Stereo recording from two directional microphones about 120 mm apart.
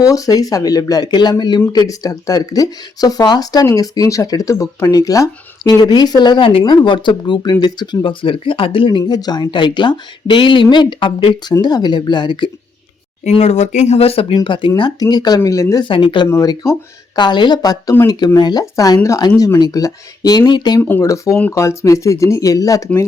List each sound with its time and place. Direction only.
0.0 s speech: 30° left (ahead or behind)
13.2 s speech: 70° left (ahead or behind); by 15.8 s 25° left (ahead or behind)
15.8 s speech: 45° left (ahead or behind)
16.3 s speech: 30° left (ahead or behind)
17.2 s speech: 40° left (ahead or behind)